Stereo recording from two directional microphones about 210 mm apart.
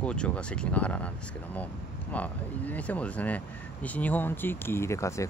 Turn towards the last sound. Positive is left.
turn(degrees=15)  # may be behind; listen again after turning